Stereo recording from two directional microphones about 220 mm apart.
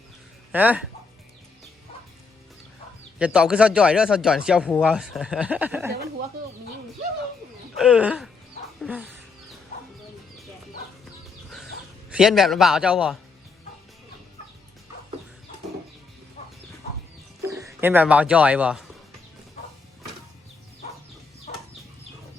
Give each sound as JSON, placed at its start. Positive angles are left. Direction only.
{"t": 0.5, "sound": "speech", "side_deg": -5}
{"t": 3.2, "sound": "speech", "side_deg": -5}
{"t": 7.8, "sound": "speech", "side_deg": -5}
{"t": 12.1, "sound": "speech", "side_deg": 0}
{"t": 17.4, "sound": "bird", "side_deg": -15}
{"t": 17.7, "sound": "speech", "side_deg": -10}
{"t": 21.5, "sound": "chicken", "side_deg": 35}